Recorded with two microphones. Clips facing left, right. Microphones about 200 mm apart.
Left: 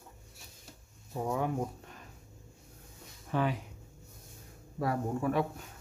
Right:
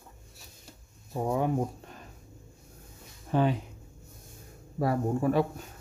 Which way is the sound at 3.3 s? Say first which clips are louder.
Right 5 dB; 30° right (ahead or behind).